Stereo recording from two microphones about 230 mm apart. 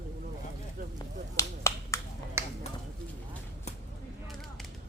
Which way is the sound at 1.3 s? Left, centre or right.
Centre.